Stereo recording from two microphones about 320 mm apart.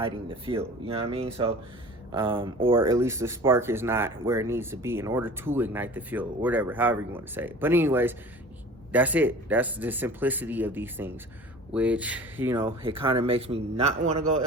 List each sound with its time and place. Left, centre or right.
0.0 s speech: centre